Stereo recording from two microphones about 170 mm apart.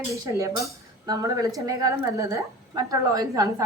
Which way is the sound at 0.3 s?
20° right (ahead or behind).